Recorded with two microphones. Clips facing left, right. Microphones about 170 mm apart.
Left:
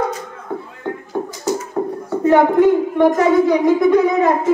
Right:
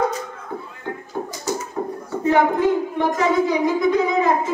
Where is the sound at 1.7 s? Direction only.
55° left (ahead or behind).